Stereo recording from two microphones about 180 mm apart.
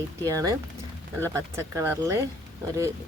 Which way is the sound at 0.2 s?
20° right (ahead or behind).